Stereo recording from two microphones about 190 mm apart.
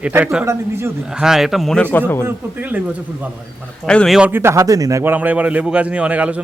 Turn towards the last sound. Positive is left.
turn(degrees=-5)  # may be behind; listen again after turning